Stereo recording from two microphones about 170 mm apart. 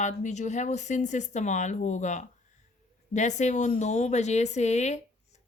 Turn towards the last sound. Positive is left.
turn(degrees=40)  # may be behind; listen again after turning